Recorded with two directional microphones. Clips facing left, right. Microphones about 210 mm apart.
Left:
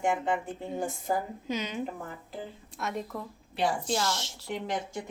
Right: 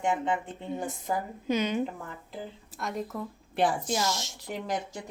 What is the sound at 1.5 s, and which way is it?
Speech, 55° right (ahead or behind).